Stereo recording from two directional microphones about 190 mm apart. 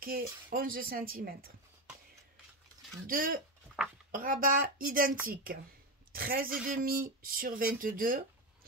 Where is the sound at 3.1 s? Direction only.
45° right (ahead or behind).